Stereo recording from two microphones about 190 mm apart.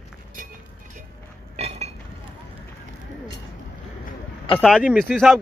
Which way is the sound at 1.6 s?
35° right (ahead or behind).